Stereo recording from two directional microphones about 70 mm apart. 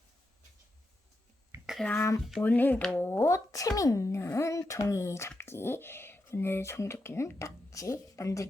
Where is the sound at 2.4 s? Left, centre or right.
Left.